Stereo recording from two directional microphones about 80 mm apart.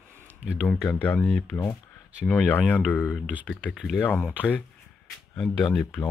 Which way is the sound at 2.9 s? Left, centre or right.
Centre.